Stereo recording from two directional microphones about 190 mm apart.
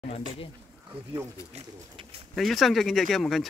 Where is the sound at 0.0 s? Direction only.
30° left (ahead or behind).